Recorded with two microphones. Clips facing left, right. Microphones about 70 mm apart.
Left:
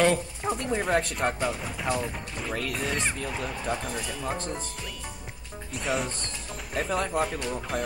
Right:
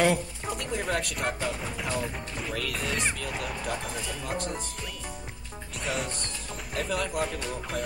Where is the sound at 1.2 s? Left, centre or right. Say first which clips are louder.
Left 3 dB; centre.